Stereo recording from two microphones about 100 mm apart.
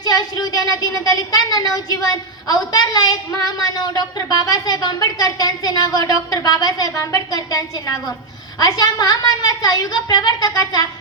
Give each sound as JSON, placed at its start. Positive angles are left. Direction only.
{"t": 0.0, "sound": "speech", "side_deg": 40}